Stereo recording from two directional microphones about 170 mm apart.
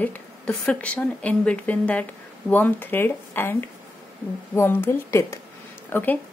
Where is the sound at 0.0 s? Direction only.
10° left (ahead or behind).